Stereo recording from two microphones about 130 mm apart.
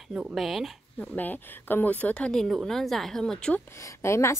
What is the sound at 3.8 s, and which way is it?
Speech, 20° left (ahead or behind).